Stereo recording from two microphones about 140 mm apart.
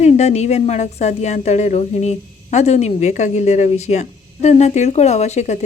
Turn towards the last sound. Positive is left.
turn(degrees=55)  # may be behind; listen again after turning